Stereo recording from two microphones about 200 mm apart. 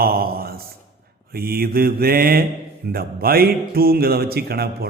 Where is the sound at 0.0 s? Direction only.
50° right (ahead or behind).